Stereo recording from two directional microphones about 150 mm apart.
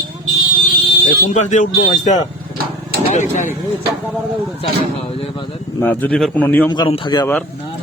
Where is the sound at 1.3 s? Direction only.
55° left (ahead or behind).